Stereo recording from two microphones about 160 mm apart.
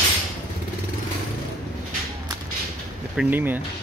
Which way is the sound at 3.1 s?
5° right (ahead or behind).